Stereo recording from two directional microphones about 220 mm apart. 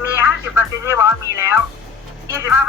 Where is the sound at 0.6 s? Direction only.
10° right (ahead or behind).